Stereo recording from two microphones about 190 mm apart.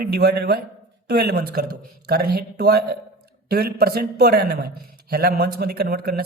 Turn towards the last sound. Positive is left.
turn(degrees=-55)  # may be behind; listen again after turning